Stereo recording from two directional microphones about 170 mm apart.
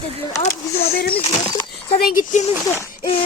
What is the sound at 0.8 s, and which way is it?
Speech, 60° left (ahead or behind).